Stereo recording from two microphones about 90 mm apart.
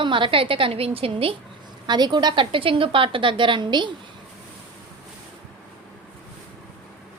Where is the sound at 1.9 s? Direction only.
50° right (ahead or behind).